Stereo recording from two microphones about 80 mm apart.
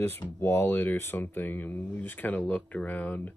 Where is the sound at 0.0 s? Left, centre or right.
Left.